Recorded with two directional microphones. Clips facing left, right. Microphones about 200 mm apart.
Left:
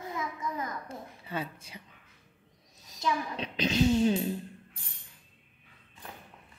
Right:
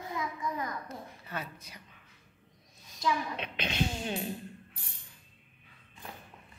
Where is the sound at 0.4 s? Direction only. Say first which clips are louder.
Even; 25° left (ahead or behind).